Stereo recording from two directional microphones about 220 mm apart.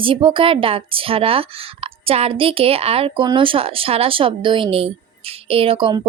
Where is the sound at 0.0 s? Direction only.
25° right (ahead or behind).